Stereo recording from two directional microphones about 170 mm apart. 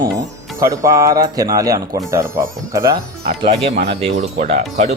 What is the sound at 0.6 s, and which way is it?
Speech, 20° right (ahead or behind).